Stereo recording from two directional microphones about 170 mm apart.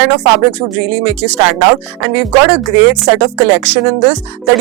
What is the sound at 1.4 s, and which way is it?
Speech, 20° right (ahead or behind).